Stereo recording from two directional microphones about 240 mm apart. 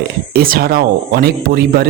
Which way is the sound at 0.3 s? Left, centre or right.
Right.